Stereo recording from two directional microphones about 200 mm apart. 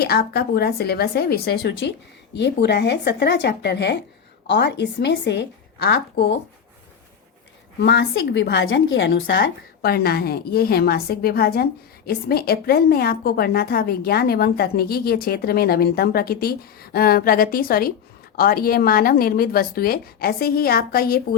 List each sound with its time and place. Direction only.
0.0 s a woman's voice: 50° left (ahead or behind)
7.8 s speech: 60° left (ahead or behind)